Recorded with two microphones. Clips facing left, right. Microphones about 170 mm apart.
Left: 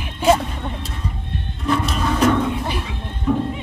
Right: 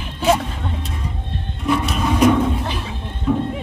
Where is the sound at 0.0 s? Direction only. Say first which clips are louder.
Left 1 dB; 10° left (ahead or behind).